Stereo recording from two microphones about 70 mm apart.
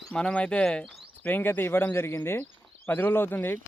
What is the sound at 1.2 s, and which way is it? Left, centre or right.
Speech, left.